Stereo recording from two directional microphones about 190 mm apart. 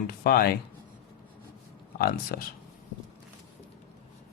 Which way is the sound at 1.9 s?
55° left (ahead or behind).